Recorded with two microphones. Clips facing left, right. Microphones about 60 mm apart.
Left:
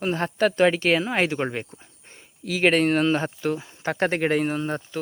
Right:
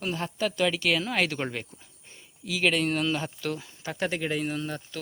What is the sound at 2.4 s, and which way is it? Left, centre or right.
Speech, left.